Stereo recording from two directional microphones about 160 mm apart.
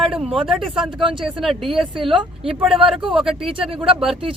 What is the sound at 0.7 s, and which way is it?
Speech, 30° right (ahead or behind).